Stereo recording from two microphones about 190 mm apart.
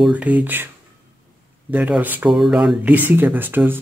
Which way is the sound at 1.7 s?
10° right (ahead or behind).